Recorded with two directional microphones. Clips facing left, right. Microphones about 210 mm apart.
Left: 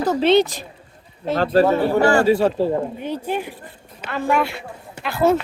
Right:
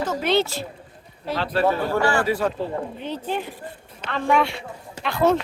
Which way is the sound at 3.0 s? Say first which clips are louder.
Left 3 dB; 10° left (ahead or behind).